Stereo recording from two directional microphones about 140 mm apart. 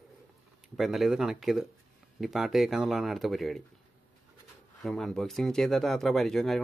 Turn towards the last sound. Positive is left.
turn(degrees=0)  # may be behind; listen again after turning